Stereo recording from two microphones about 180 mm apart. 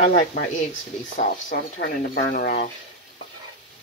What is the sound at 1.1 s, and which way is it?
Speech, 50° left (ahead or behind).